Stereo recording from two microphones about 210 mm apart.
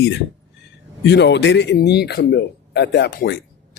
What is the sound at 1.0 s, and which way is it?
Speech, 55° left (ahead or behind).